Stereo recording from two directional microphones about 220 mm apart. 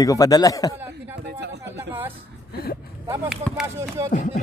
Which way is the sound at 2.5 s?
45° left (ahead or behind).